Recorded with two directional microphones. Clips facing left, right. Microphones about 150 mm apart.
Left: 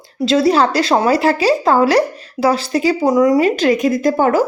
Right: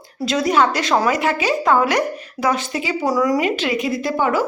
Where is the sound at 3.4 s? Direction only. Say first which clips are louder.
Left 7 dB; 40° left (ahead or behind).